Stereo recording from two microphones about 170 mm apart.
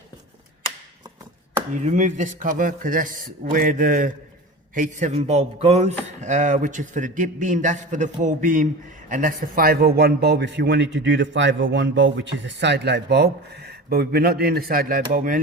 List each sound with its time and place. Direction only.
1.7 s a man's voice: 45° right (ahead or behind)